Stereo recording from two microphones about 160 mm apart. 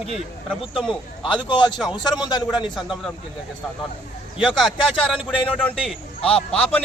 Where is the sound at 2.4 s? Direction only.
Centre (ahead or behind).